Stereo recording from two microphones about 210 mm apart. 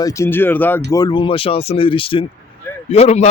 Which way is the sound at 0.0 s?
15° left (ahead or behind).